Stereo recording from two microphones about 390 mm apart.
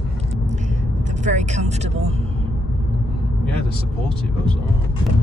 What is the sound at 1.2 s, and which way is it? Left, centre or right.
Speech, centre.